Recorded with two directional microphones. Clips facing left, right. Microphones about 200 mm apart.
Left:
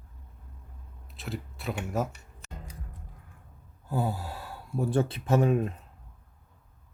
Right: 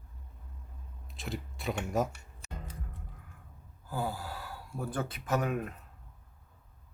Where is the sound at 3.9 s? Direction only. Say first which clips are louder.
Left 4 dB; 25° left (ahead or behind).